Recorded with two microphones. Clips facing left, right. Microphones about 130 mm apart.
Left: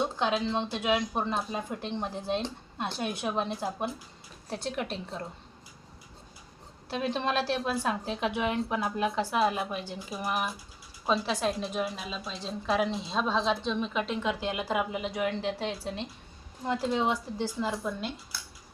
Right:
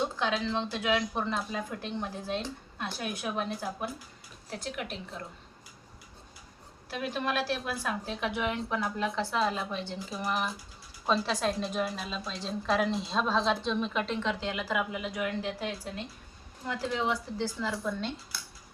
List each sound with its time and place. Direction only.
0.2 s a woman's voice: 20° left (ahead or behind)
6.9 s a woman's voice: 25° left (ahead or behind)